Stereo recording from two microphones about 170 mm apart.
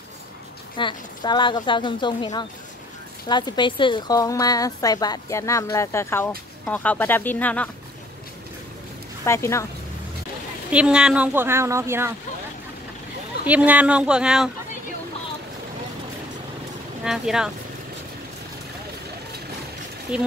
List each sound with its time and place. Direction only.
0.7 s speech: 25° left (ahead or behind); by 7.7 s 10° left (ahead or behind)
9.2 s speech: 15° left (ahead or behind)
10.7 s a woman's voice: 5° right (ahead or behind)
13.5 s a woman's voice: 10° right (ahead or behind)
17.0 s speech: 5° right (ahead or behind)
20.1 s a woman's voice: 5° right (ahead or behind)